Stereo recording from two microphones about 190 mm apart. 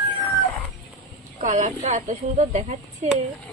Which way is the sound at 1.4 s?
40° right (ahead or behind).